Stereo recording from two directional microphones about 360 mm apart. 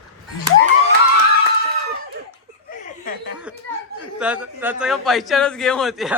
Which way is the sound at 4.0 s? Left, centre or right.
Centre.